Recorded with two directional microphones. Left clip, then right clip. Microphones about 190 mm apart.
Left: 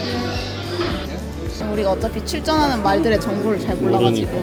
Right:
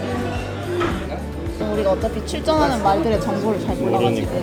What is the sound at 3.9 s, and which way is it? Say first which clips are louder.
Speech: left 1 dB; 35° left (ahead or behind).